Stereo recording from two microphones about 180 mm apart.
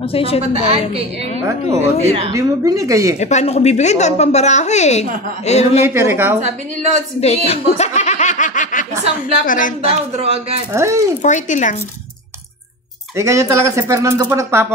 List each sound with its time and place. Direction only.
0.0 s speech: 30° left (ahead or behind)
0.5 s speech: 35° right (ahead or behind)
2.3 s speech: 20° right (ahead or behind)
3.2 s speech: 40° left (ahead or behind)
5.9 s speech: 15° right (ahead or behind)
6.4 s speech: 40° right (ahead or behind)
7.2 s snicker: 35° left (ahead or behind)
9.5 s speech: 50° left (ahead or behind)
9.8 s speech: 35° right (ahead or behind)
10.7 s speech: 15° right (ahead or behind)
11.2 s speech: 45° left (ahead or behind)
13.1 s speech: 15° right (ahead or behind)